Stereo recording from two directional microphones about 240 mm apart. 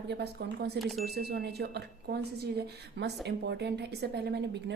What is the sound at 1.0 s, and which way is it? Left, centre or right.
A woman's voice, right.